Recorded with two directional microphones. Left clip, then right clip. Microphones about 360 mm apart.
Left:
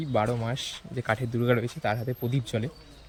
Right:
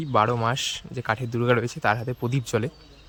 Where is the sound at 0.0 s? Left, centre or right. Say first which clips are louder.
Right 6 dB; centre.